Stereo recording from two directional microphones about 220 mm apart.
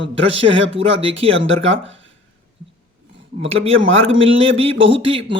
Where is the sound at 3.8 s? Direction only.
60° right (ahead or behind).